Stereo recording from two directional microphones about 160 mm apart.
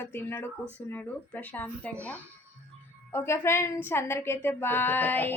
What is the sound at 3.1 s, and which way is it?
Speech, 15° left (ahead or behind).